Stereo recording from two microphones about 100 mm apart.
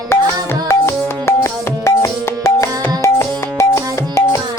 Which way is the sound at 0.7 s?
25° left (ahead or behind).